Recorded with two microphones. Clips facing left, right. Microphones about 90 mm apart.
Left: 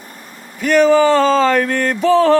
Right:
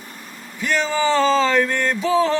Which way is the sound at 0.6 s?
50° left (ahead or behind).